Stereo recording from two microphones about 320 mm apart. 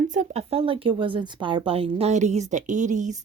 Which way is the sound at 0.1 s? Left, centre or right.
Right.